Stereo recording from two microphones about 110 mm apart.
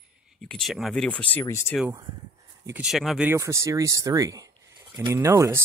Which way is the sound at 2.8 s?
Centre (ahead or behind).